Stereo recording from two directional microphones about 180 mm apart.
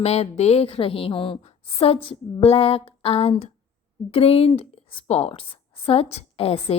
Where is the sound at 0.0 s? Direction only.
35° left (ahead or behind).